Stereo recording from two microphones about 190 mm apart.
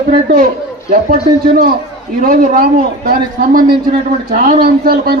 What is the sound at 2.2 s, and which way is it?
A man's voice, 45° right (ahead or behind).